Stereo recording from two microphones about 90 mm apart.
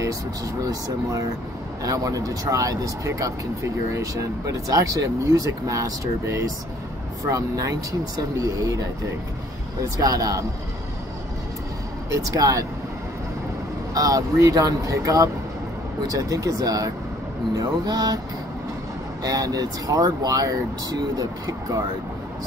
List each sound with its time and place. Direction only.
0.6 s speech: 40° right (ahead or behind)
9.9 s speech: 40° right (ahead or behind)
12.1 s speech: 40° right (ahead or behind)
13.9 s speech: 40° right (ahead or behind)
19.2 s speech: 45° right (ahead or behind)